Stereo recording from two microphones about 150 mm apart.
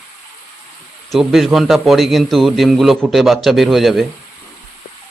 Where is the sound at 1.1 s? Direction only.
Centre (ahead or behind).